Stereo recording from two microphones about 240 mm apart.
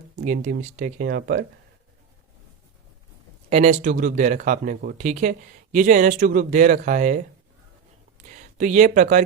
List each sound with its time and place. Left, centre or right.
0.2 s speech: right
3.5 s speech: right